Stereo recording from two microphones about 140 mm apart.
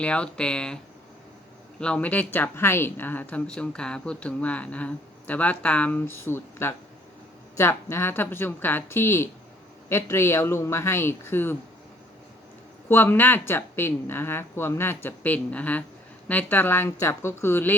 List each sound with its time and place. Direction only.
0.0 s speech: 10° left (ahead or behind)
1.8 s speech: 10° left (ahead or behind)
12.9 s speech: 15° left (ahead or behind)